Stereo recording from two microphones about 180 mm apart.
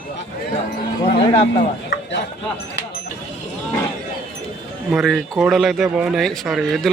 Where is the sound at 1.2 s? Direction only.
30° left (ahead or behind).